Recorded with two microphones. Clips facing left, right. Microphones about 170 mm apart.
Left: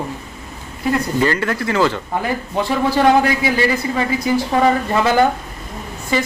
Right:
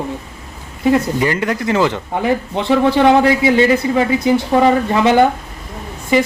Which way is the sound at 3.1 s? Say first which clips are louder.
Right 3 dB; 25° right (ahead or behind).